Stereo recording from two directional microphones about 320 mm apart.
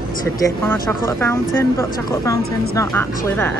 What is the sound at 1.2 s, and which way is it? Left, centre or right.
A woman's voice, centre.